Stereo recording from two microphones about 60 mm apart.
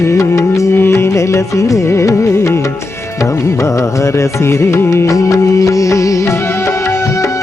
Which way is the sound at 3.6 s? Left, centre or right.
Left.